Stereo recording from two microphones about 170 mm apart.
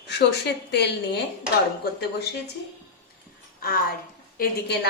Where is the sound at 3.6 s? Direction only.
60° left (ahead or behind).